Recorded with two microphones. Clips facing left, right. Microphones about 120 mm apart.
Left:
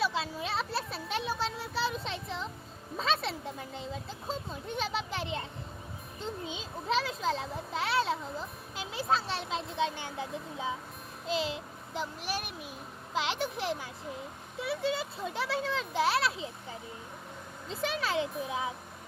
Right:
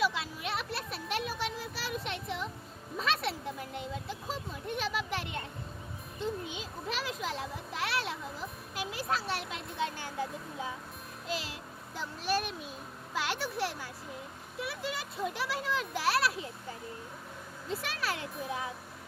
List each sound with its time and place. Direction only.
0.0 s a sound: 30° left (ahead or behind)
3.8 s a child's voice: 30° left (ahead or behind)
17.7 s a child's voice: 25° left (ahead or behind)